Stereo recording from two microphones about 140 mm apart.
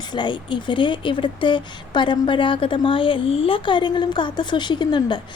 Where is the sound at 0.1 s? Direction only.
35° left (ahead or behind).